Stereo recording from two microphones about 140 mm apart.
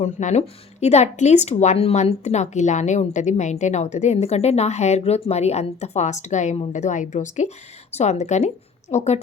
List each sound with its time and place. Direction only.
0.0 s a woman's voice: 55° left (ahead or behind)